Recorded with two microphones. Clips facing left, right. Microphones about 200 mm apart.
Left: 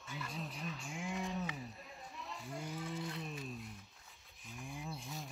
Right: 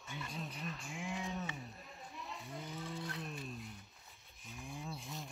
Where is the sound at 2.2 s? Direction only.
Centre (ahead or behind).